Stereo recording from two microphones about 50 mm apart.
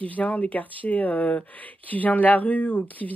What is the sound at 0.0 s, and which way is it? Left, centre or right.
Speech, left.